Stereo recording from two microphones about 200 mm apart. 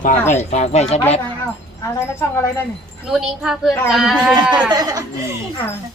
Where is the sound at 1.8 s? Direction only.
15° left (ahead or behind).